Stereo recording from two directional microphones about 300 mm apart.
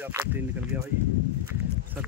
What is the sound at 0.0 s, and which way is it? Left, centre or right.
Speech, centre.